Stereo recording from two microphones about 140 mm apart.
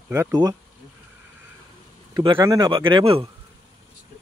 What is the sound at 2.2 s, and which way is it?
A man's voice, 40° right (ahead or behind).